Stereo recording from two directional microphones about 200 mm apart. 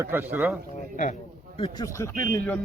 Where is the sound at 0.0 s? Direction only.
10° right (ahead or behind).